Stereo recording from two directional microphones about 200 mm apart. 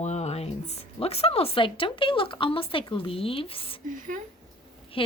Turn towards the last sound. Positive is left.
turn(degrees=25)  # may be behind; listen again after turning